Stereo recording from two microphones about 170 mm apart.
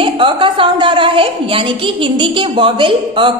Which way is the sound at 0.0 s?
30° right (ahead or behind).